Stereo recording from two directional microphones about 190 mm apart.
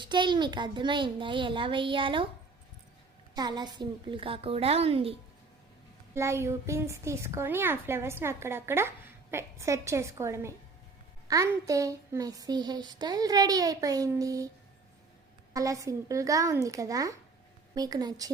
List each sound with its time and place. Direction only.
0.0 s a child's voice: 25° right (ahead or behind)
3.3 s a child's voice: 20° right (ahead or behind)
6.1 s a woman's voice: 15° right (ahead or behind)
15.5 s a woman's voice: 15° right (ahead or behind)